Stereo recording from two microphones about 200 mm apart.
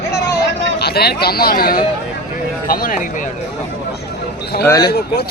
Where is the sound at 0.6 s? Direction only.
55° left (ahead or behind).